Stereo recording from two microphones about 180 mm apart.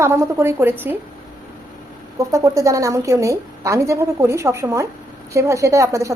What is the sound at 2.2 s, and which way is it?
A woman's voice, 15° right (ahead or behind).